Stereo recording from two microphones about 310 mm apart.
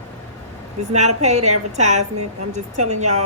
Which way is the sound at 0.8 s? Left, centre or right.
Right.